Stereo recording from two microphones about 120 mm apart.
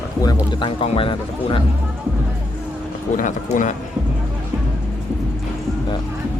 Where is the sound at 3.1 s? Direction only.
90° left.